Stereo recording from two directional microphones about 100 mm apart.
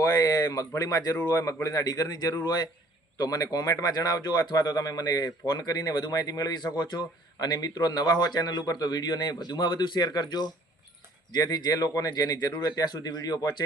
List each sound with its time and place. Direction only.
0.2 s a sound: 35° left (ahead or behind)
1.1 s speech: 20° left (ahead or behind)
1.5 s speech: 35° left (ahead or behind)